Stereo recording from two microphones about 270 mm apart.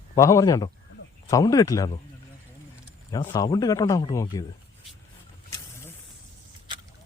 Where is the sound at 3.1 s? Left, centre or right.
Centre.